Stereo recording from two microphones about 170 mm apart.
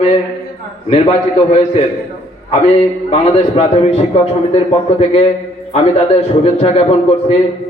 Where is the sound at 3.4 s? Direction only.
40° left (ahead or behind).